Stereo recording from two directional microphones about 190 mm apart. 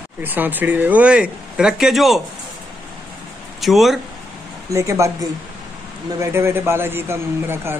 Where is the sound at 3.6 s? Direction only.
Centre (ahead or behind).